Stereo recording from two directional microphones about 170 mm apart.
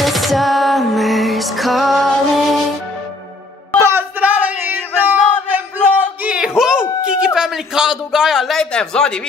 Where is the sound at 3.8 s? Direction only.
10° right (ahead or behind).